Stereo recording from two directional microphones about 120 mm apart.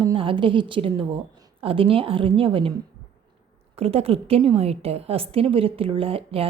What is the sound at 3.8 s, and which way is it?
A woman's voice, 55° right (ahead or behind).